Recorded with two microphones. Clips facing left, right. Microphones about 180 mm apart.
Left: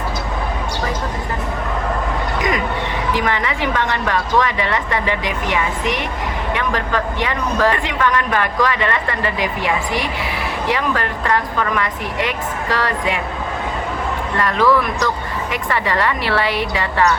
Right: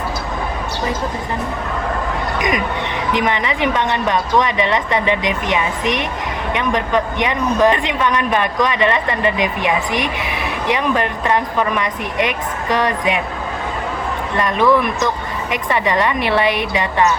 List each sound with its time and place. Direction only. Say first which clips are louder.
2.4 s a woman's voice: right 1 dB; 20° right (ahead or behind)
14.3 s a woman's voice: right 1 dB; 20° right (ahead or behind)